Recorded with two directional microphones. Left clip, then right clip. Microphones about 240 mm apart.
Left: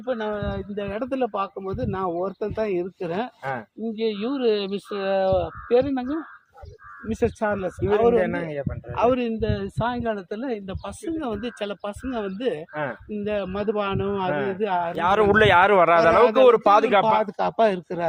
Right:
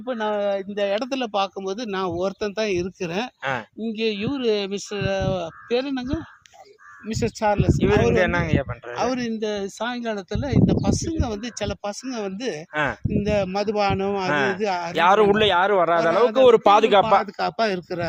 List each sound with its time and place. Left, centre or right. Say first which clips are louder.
0.0 s speech: right 2 dB; right
0.3 s speech: right 7 dB; right
7.2 s speech: right 2 dB; right
7.9 s speech: left 1 dB; centre
9.0 s speech: left 4 dB; right
12.7 s speech: right 5 dB; right
13.2 s speech: right 3 dB; right
14.3 s speech: right 5 dB; right
14.6 s speech: left 1 dB; right
14.9 s speech: right 4 dB; centre
15.4 s speech: left 3 dB; centre
16.2 s speech: right 1 dB; right